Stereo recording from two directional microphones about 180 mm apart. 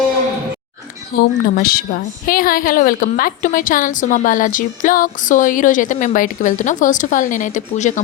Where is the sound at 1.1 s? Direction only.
55° left (ahead or behind).